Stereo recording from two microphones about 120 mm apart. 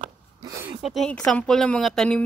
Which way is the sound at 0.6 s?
5° right (ahead or behind).